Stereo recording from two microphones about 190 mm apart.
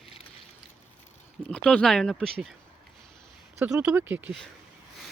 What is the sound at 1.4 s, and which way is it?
Speech, 5° left (ahead or behind).